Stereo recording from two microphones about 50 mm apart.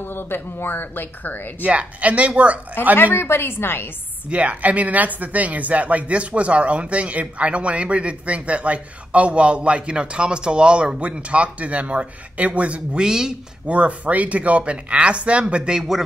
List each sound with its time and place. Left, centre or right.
0.0 s speech: left
1.6 s a woman's voice: right
3.0 s speech: left
4.3 s a woman's voice: right
13.0 s speech: centre
13.7 s a woman's voice: right